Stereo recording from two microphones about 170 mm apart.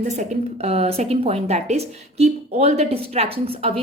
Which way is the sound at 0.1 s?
40° right (ahead or behind).